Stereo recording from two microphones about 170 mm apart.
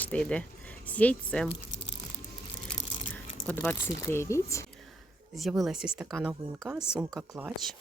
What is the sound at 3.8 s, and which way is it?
Speech, 15° left (ahead or behind).